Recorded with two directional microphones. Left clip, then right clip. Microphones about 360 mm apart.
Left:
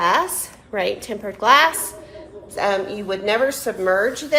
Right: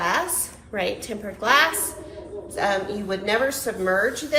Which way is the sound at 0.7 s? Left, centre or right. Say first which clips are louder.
Left 4 dB; centre.